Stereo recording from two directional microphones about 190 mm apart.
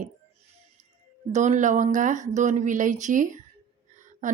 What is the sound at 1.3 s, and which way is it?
A woman's voice, 40° right (ahead or behind).